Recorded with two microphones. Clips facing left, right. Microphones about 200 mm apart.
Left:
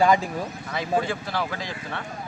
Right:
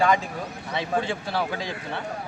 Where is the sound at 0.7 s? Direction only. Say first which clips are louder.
Left 1 dB; 25° right (ahead or behind).